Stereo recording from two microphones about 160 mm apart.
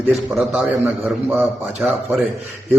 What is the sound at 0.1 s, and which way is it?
Speech, centre (ahead or behind).